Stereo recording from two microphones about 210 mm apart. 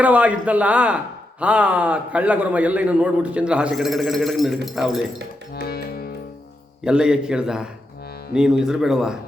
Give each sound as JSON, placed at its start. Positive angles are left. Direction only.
{"t": 0.0, "sound": "a man's voice", "side_deg": -5}
{"t": 5.6, "sound": "music", "side_deg": 45}
{"t": 6.8, "sound": "a man's voice", "side_deg": -5}